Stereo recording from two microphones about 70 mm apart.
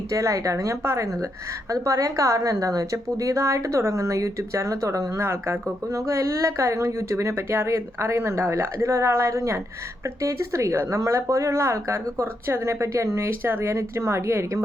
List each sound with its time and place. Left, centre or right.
0.1 s a woman's voice: right